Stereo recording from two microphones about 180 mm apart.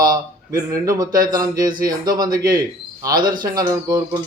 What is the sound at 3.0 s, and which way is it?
Speech, 20° right (ahead or behind).